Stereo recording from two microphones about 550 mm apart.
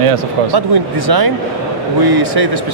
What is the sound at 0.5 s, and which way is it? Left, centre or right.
Speech, right.